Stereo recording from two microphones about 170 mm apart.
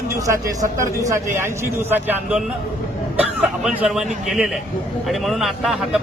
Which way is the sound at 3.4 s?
Centre (ahead or behind).